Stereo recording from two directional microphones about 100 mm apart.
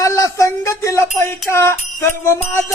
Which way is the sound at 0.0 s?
30° left (ahead or behind).